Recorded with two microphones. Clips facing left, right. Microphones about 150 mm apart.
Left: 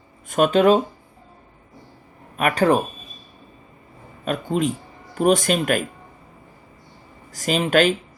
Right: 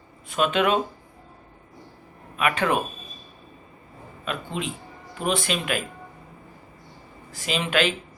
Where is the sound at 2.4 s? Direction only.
40° left (ahead or behind).